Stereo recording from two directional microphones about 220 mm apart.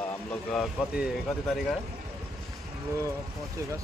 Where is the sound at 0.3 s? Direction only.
5° left (ahead or behind).